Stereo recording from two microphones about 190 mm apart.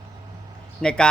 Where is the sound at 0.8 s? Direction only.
5° left (ahead or behind).